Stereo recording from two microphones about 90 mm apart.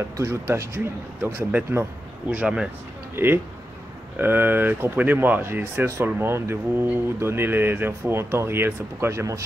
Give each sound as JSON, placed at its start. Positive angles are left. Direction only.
{"t": 0.2, "sound": "speech", "side_deg": -30}
{"t": 3.2, "sound": "speech", "side_deg": -25}